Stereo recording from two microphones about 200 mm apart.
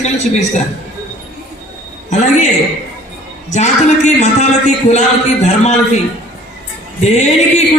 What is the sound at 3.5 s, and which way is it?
Speech, 35° left (ahead or behind).